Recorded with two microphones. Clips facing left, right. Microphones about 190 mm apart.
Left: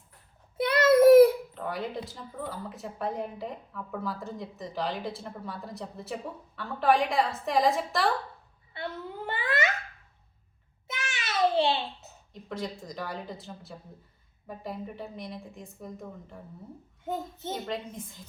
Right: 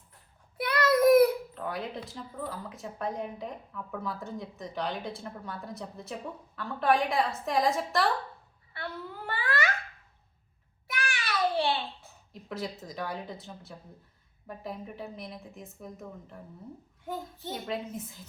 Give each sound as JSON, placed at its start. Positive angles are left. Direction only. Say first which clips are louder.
{"t": 0.5, "sound": "child singing", "louder": "left 5 dB", "side_deg": 25}
{"t": 1.5, "sound": "a woman's voice", "louder": "left 2 dB", "side_deg": 0}
{"t": 8.7, "sound": "a sound", "louder": "left 2 dB", "side_deg": 20}
{"t": 10.8, "sound": "a sound", "louder": "right 2 dB", "side_deg": 20}
{"t": 12.3, "sound": "a woman's voice", "louder": "left 1 dB", "side_deg": 0}
{"t": 17.1, "sound": "a child's voice", "louder": "left 3 dB", "side_deg": 20}
{"t": 17.5, "sound": "a woman's voice", "louder": "even", "side_deg": -5}